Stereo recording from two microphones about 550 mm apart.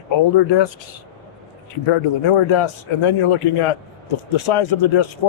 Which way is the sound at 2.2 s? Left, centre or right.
Left.